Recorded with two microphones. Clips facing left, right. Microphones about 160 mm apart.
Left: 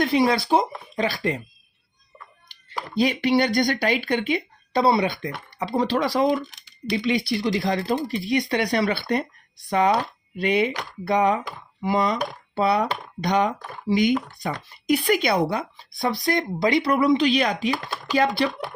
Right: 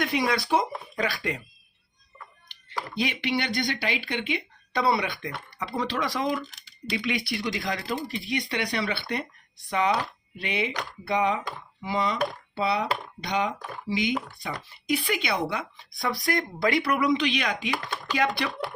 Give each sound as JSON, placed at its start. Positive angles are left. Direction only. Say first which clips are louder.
{"t": 0.0, "sound": "speech", "louder": "left 6 dB", "side_deg": 30}
{"t": 2.5, "sound": "speech", "louder": "left 2 dB", "side_deg": 35}